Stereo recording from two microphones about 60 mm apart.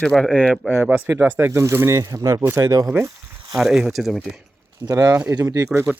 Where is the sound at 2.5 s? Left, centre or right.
Right.